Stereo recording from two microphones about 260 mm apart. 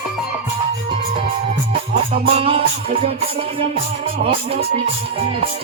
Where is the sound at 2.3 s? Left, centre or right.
Right.